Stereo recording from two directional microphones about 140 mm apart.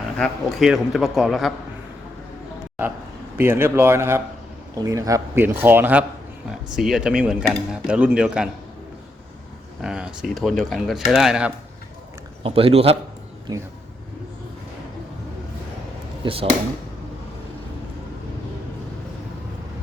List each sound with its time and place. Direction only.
0.2 s speech: centre (ahead or behind)
3.3 s speech: 15° right (ahead or behind)
9.8 s speech: 5° right (ahead or behind)
12.4 s a man's voice: 40° right (ahead or behind)
16.2 s speech: 40° right (ahead or behind)